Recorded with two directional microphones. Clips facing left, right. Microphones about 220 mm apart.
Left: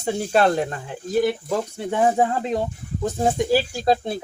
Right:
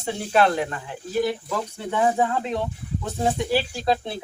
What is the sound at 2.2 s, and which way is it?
Speech, 40° left (ahead or behind).